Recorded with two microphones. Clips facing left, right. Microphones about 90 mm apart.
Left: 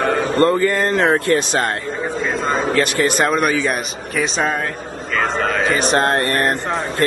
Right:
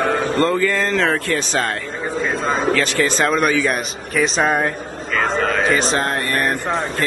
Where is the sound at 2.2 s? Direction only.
Centre (ahead or behind).